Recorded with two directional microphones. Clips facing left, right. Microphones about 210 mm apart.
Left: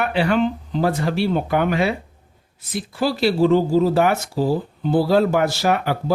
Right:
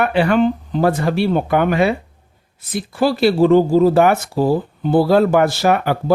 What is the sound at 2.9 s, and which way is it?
Speech, 55° right (ahead or behind).